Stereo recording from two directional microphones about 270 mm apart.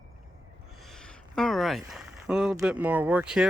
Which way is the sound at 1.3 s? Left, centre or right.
Centre.